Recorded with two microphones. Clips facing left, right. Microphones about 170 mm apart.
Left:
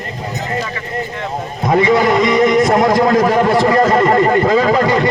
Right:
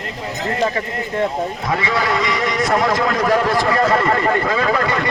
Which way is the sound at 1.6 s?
20° left (ahead or behind).